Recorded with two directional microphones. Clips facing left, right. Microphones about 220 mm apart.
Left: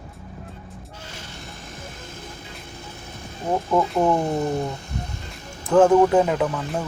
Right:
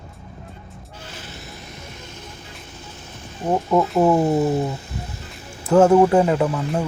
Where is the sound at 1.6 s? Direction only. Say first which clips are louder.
Even; 50° left (ahead or behind).